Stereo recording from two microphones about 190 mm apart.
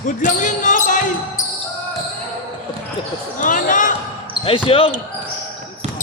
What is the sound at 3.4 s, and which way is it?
Basketball bounce, 45° left (ahead or behind).